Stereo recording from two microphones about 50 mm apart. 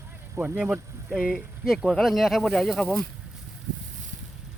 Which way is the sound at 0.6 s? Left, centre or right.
Centre.